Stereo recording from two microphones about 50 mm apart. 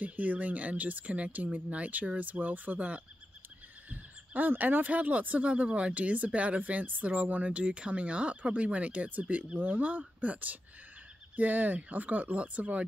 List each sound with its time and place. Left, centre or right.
0.0 s speech: right